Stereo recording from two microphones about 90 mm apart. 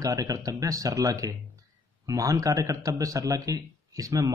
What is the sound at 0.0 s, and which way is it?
A man's voice, 40° right (ahead or behind).